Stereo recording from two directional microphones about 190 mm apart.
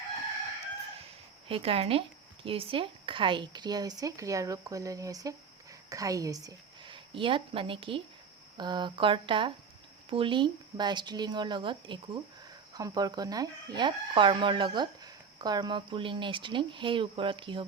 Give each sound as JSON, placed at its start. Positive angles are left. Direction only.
{"t": 1.5, "sound": "a woman's voice", "side_deg": -30}